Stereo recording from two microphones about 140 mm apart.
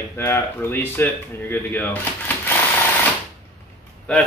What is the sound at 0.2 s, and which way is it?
Speech, 15° left (ahead or behind).